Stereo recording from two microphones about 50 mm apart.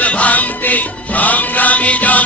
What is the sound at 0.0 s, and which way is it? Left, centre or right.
Music, left.